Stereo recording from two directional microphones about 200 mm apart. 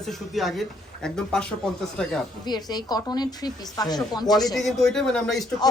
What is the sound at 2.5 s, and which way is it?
A woman's voice, 20° left (ahead or behind).